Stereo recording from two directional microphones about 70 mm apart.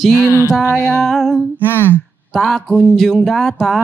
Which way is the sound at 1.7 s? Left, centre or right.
Left.